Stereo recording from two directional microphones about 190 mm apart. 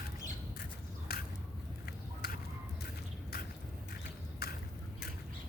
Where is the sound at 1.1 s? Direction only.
55° left (ahead or behind).